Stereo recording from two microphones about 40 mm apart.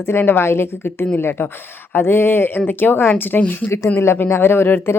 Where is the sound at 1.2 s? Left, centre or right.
Left.